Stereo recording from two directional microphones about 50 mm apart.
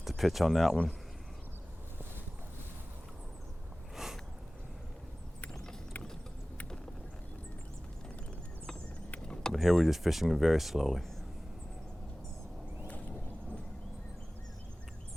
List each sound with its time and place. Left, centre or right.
0.0 s speech: centre
3.9 s a sound: centre
9.2 s vehicle: centre
9.6 s speech: centre